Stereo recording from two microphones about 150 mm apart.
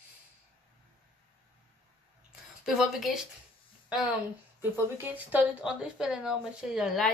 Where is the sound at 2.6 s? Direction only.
Centre (ahead or behind).